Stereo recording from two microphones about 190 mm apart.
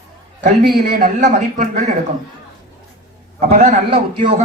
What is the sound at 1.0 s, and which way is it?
Speech, 40° right (ahead or behind).